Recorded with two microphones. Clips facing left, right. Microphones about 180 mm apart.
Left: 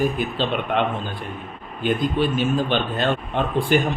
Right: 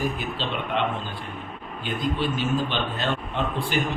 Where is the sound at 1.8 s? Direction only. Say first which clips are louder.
Left 6 dB; 50° left (ahead or behind).